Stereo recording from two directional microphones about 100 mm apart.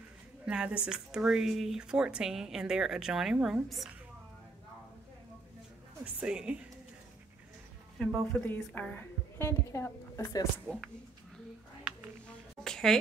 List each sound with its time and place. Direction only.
0.5 s a woman's voice: 10° right (ahead or behind)
6.1 s speech: 10° right (ahead or behind)
8.0 s speech: 5° left (ahead or behind)
8.7 s a woman's voice: 20° left (ahead or behind)
10.7 s speech: 15° left (ahead or behind)
11.9 s a sound: 10° right (ahead or behind)
12.6 s a sound: 5° left (ahead or behind)